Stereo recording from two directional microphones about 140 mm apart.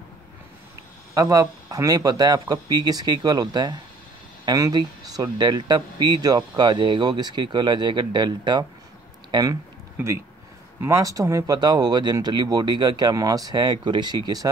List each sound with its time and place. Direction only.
1.1 s speech: 25° right (ahead or behind)